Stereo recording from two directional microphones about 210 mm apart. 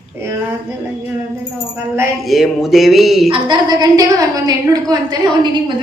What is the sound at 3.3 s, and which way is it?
A woman's voice, 20° right (ahead or behind).